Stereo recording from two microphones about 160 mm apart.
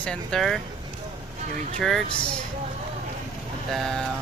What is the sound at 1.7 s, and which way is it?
Speech, centre (ahead or behind).